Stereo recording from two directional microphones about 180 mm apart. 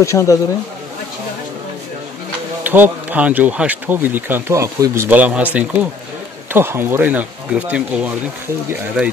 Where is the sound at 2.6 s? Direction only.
10° right (ahead or behind).